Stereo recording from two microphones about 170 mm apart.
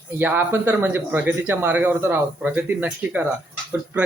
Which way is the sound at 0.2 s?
10° right (ahead or behind).